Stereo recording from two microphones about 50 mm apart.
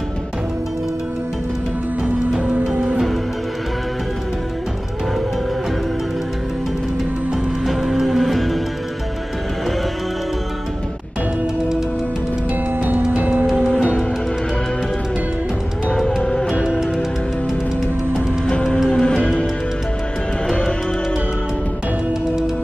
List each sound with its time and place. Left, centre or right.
2.7 s music: centre
7.6 s music: centre
13.1 s music: right
16.2 s music: centre
18.5 s music: centre